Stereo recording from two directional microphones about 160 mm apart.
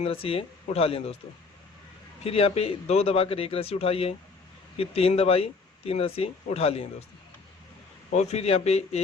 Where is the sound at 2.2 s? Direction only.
40° left (ahead or behind).